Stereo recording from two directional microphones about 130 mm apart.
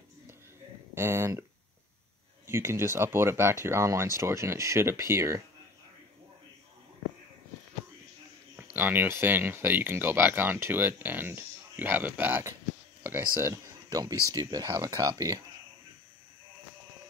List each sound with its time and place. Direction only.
0.9 s speech: 20° right (ahead or behind)
2.4 s speech: 20° right (ahead or behind)
8.7 s speech: 15° right (ahead or behind)